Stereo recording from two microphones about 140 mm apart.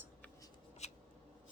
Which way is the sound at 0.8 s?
50° left (ahead or behind).